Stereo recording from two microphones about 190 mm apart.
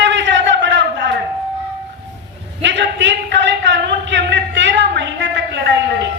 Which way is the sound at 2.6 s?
70° right (ahead or behind).